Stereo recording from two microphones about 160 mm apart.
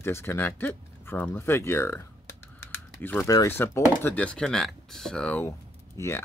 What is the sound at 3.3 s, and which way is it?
Speech, 20° left (ahead or behind).